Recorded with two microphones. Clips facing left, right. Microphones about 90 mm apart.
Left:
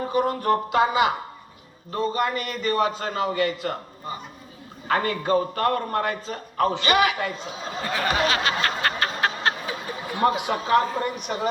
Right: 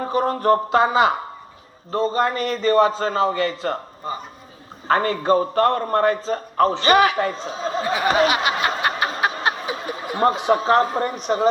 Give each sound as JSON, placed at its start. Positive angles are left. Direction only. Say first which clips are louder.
{"t": 0.0, "sound": "a man's voice", "louder": "right 3 dB", "side_deg": -35}
{"t": 8.3, "sound": "snicker", "louder": "right 3 dB", "side_deg": -15}
{"t": 10.2, "sound": "a man's voice", "louder": "right 4 dB", "side_deg": -35}